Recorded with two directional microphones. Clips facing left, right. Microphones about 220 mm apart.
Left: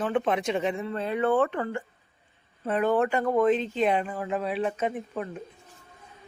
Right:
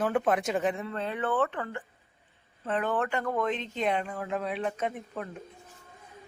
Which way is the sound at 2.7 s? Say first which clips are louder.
Left 5 dB; 10° left (ahead or behind).